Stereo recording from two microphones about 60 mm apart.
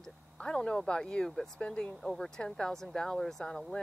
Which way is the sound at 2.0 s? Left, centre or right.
Centre.